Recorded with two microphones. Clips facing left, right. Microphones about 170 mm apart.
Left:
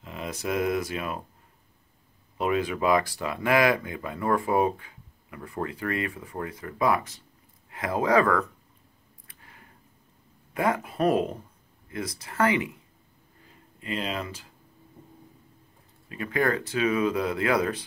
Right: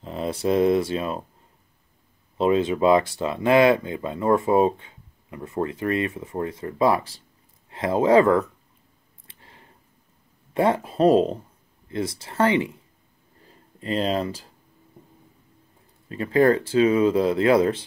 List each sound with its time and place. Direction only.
0.0 s speech: 30° right (ahead or behind)
2.3 s speech: 25° right (ahead or behind)
9.3 s a sound: 30° right (ahead or behind)
10.5 s speech: 30° right (ahead or behind)
13.7 s speech: 35° right (ahead or behind)
16.1 s speech: 30° right (ahead or behind)